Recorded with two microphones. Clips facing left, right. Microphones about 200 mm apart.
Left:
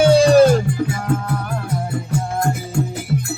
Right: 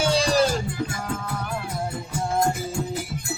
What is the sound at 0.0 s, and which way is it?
Music, 60° left (ahead or behind).